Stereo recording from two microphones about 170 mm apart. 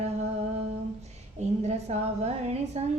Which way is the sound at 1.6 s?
40° right (ahead or behind).